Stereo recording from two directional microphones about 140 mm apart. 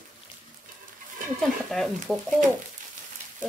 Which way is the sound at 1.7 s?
Centre (ahead or behind).